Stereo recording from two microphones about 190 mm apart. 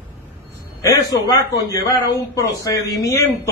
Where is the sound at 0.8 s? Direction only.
20° left (ahead or behind).